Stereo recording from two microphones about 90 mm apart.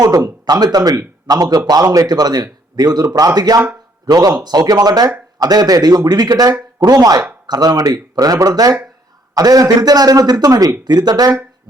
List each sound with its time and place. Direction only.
0.0 s a man's voice: 40° right (ahead or behind)